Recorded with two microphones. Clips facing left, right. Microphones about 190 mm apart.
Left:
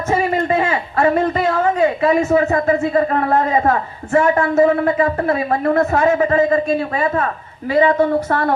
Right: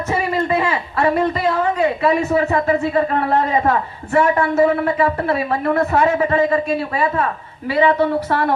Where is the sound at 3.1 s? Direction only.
40° left (ahead or behind).